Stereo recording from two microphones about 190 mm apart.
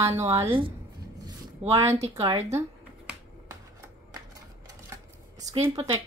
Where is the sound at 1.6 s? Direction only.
30° right (ahead or behind).